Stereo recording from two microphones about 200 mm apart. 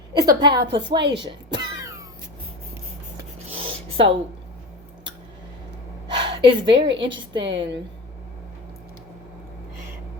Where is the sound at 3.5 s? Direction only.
30° right (ahead or behind).